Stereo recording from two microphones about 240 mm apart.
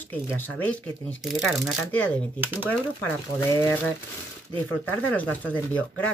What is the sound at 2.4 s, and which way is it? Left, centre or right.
Speech, centre.